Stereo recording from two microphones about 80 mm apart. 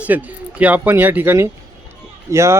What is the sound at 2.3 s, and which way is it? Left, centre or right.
Speech, right.